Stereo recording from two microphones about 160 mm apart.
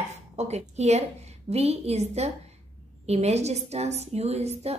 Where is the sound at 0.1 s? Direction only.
45° right (ahead or behind).